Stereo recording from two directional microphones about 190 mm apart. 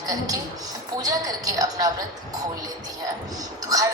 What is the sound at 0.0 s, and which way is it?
A woman's voice, 20° right (ahead or behind).